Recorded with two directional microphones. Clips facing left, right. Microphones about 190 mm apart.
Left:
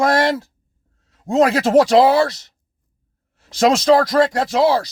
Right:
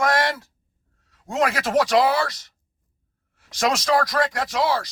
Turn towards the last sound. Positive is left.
turn(degrees=30)  # may be behind; listen again after turning